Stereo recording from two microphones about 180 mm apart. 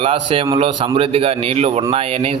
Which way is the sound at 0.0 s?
30° right (ahead or behind).